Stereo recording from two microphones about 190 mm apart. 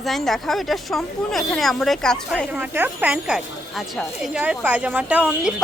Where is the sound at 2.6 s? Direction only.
10° right (ahead or behind).